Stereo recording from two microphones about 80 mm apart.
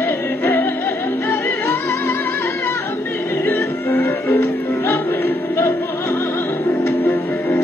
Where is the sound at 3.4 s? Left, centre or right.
Left.